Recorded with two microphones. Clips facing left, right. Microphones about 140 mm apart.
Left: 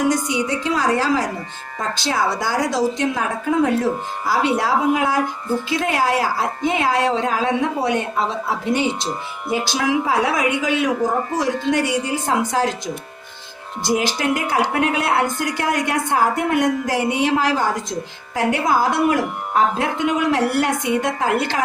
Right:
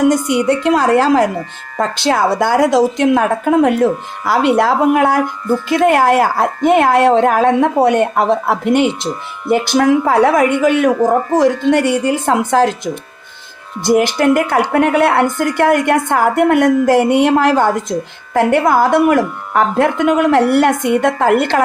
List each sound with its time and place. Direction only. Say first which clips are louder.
0.1 s a woman's voice: right 7 dB; 60° right (ahead or behind)
9.5 s a woman's voice: right 8 dB; 50° right (ahead or behind)